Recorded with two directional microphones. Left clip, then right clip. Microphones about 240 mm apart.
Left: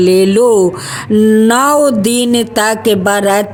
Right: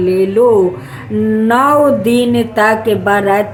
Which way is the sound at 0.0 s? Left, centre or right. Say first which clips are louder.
Left 2 dB; left.